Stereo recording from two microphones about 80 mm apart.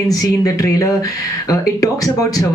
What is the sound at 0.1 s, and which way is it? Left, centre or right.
Speech, left.